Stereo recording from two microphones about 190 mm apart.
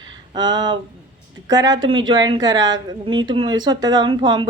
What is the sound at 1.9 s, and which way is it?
Speech, 25° right (ahead or behind).